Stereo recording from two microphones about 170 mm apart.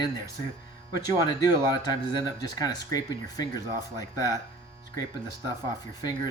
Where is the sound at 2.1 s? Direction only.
20° left (ahead or behind).